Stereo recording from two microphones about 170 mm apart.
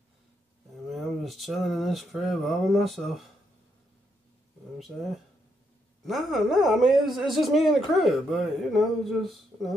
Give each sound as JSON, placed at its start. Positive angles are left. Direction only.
{"t": 0.9, "sound": "speech", "side_deg": 0}
{"t": 4.7, "sound": "speech", "side_deg": 0}